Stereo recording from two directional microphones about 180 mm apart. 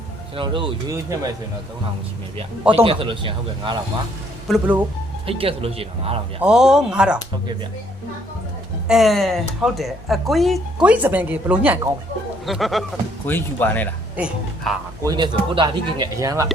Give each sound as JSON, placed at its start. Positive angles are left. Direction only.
{"t": 0.3, "sound": "speech", "side_deg": -30}
{"t": 2.7, "sound": "speech", "side_deg": -30}
{"t": 4.4, "sound": "speech", "side_deg": -5}
{"t": 5.2, "sound": "speech", "side_deg": -30}
{"t": 6.4, "sound": "speech", "side_deg": -5}
{"t": 8.9, "sound": "speech", "side_deg": 0}
{"t": 13.2, "sound": "speech", "side_deg": 10}
{"t": 14.2, "sound": "speech", "side_deg": -5}
{"t": 15.0, "sound": "speech", "side_deg": -25}